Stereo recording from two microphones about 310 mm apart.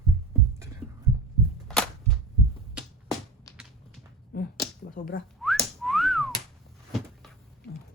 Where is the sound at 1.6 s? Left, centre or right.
Centre.